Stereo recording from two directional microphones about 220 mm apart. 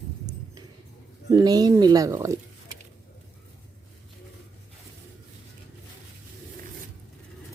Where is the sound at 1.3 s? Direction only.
15° right (ahead or behind).